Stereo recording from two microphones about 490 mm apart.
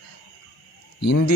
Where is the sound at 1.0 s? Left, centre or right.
Left.